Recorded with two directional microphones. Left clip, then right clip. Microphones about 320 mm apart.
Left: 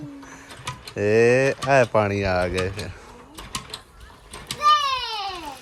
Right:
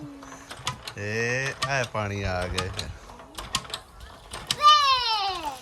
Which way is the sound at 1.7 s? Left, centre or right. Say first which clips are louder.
Left 10 dB; centre.